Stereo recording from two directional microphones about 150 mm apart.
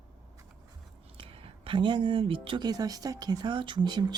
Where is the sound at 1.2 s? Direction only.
40° right (ahead or behind).